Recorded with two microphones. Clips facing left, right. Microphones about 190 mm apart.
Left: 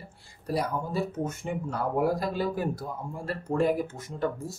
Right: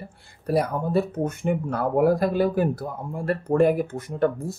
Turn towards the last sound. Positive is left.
turn(degrees=-60)  # may be behind; listen again after turning